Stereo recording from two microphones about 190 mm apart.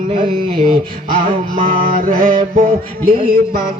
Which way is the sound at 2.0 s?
45° right (ahead or behind).